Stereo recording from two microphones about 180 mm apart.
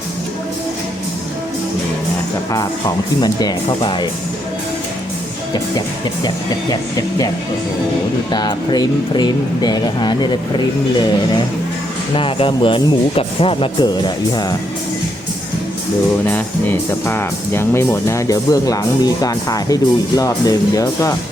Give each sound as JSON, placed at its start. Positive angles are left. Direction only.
{"t": 3.2, "sound": "speech", "side_deg": 25}
{"t": 6.2, "sound": "speech", "side_deg": 20}
{"t": 8.3, "sound": "speech", "side_deg": 25}
{"t": 17.1, "sound": "speech", "side_deg": 15}